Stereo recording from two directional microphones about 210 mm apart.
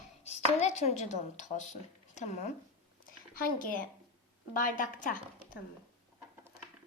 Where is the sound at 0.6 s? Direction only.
30° left (ahead or behind).